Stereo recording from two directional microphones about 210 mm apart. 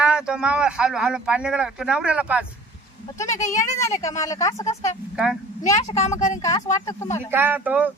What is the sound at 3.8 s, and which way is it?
Speech, 15° left (ahead or behind).